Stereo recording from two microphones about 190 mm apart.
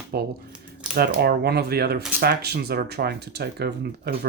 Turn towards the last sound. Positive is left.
turn(degrees=-60)  # may be behind; listen again after turning